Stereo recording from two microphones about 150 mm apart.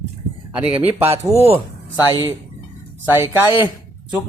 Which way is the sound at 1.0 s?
45° right (ahead or behind).